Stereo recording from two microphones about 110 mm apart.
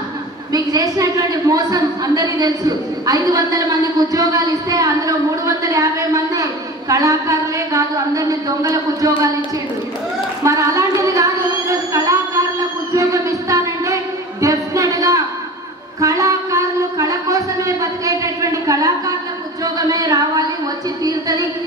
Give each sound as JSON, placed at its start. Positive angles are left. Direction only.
{"t": 0.5, "sound": "a woman's voice", "side_deg": -35}
{"t": 10.4, "sound": "a sound", "side_deg": -30}
{"t": 21.0, "sound": "a woman's voice", "side_deg": -35}